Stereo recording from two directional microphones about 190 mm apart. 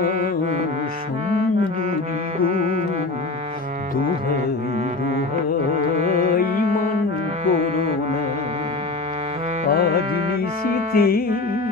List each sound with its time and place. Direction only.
10.9 s music: 50° left (ahead or behind)